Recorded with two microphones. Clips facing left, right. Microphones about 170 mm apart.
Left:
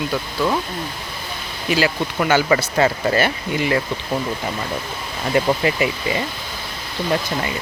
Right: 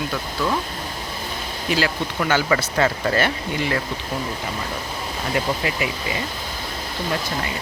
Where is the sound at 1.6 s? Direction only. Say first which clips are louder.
Left 3 dB; 10° left (ahead or behind).